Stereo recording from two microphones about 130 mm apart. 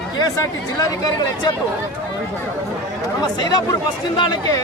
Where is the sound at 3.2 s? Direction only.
30° left (ahead or behind).